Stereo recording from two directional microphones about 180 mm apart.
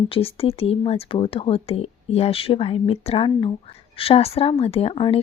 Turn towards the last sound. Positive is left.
turn(degrees=30)  # may be behind; listen again after turning